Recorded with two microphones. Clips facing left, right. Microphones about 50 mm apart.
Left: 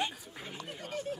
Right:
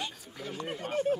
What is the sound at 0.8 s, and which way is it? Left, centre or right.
Speech, right.